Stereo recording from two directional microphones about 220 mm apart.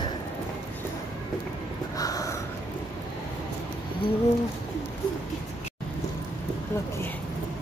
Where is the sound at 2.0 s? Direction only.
15° left (ahead or behind).